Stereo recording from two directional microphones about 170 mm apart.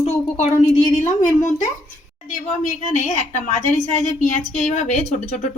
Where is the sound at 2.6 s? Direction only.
45° left (ahead or behind).